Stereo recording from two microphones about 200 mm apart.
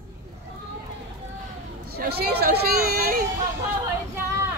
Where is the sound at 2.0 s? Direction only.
50° right (ahead or behind).